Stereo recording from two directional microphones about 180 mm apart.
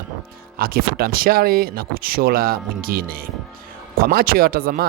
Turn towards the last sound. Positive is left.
turn(degrees=-55)  # may be behind; listen again after turning